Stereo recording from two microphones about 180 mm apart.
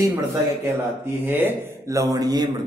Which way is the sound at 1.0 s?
10° right (ahead or behind).